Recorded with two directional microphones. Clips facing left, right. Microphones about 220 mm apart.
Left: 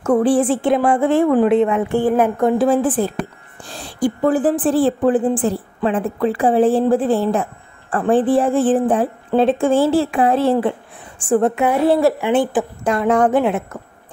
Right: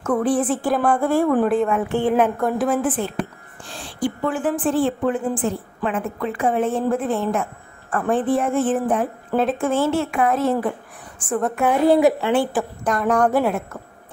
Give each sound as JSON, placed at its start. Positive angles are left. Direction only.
{"t": 0.0, "sound": "a woman's voice", "side_deg": 30}
{"t": 1.9, "sound": "a woman's voice", "side_deg": 10}
{"t": 2.3, "sound": "a woman's voice", "side_deg": 25}
{"t": 11.6, "sound": "a woman's voice", "side_deg": 5}
{"t": 12.2, "sound": "a woman's voice", "side_deg": 20}